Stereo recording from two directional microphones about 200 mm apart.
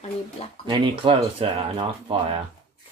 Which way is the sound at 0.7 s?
25° right (ahead or behind).